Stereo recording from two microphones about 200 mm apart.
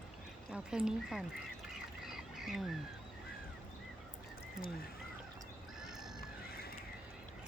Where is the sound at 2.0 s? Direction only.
Centre (ahead or behind).